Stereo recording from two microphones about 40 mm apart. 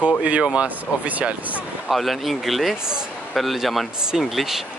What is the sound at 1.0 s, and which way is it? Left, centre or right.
Speech, right.